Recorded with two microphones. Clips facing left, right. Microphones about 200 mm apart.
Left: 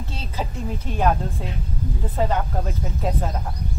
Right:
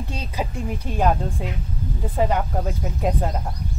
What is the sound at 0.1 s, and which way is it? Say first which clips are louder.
Speech: right 2 dB; 15° right (ahead or behind).